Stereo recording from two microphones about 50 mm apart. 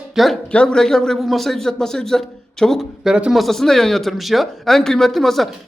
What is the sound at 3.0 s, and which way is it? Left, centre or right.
Speech, centre.